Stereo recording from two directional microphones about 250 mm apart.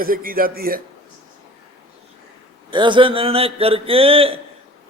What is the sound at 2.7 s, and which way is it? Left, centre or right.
Speech, centre.